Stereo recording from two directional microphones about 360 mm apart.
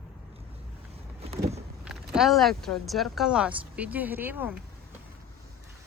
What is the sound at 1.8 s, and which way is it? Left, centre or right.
Speech, centre.